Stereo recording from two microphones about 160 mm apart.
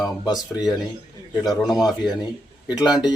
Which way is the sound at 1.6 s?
Centre (ahead or behind).